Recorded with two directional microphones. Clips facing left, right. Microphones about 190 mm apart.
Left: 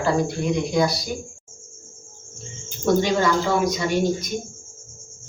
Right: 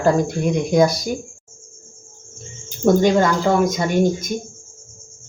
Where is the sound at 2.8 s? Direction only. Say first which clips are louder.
Right 5 dB; 45° right (ahead or behind).